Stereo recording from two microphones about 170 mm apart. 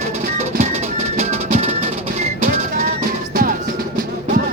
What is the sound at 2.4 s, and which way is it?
Music, 60° right (ahead or behind).